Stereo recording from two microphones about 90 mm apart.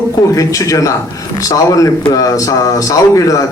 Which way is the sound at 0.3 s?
40° left (ahead or behind).